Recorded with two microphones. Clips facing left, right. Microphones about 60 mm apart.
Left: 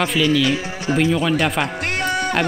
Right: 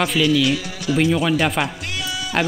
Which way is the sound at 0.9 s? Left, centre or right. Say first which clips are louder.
Even; centre.